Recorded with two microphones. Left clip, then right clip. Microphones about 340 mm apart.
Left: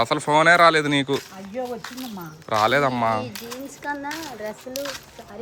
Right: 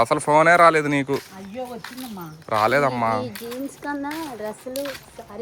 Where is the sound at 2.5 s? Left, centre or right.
Centre.